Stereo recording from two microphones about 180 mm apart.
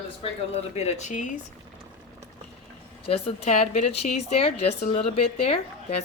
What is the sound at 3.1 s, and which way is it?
A woman's voice, 35° left (ahead or behind).